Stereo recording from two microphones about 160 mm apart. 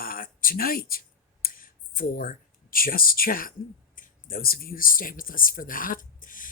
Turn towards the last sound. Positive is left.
turn(degrees=55)  # may be behind; listen again after turning